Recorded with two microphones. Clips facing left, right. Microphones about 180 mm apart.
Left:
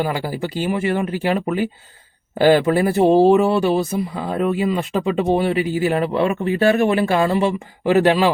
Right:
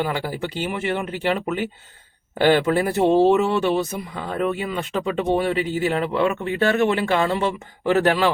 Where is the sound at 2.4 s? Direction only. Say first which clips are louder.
Left 3 dB; 40° left (ahead or behind).